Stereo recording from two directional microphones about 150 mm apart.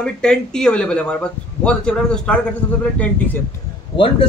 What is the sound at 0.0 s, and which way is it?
A man's voice, 5° left (ahead or behind).